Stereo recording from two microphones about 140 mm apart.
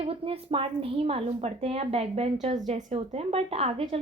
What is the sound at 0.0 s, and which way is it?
A woman's voice, 45° right (ahead or behind).